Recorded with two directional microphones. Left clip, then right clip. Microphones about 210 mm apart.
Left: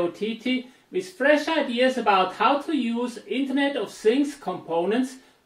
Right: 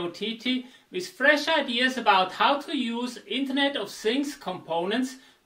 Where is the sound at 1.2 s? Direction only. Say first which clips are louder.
Left 1 dB; 45° right (ahead or behind).